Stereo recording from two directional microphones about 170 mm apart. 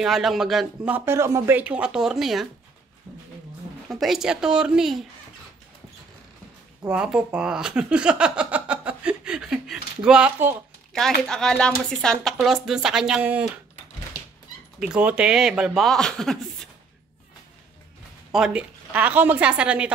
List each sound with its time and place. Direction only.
0.0 s speech: centre (ahead or behind)
3.9 s speech: centre (ahead or behind)
6.9 s speech: 5° right (ahead or behind)
14.8 s speech: 5° right (ahead or behind)
18.3 s a woman's voice: 5° right (ahead or behind)